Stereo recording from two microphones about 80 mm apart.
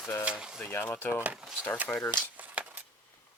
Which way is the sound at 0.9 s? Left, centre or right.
Left.